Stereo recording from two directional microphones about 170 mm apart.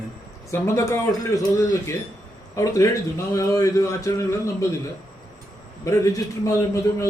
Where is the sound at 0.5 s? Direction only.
15° left (ahead or behind).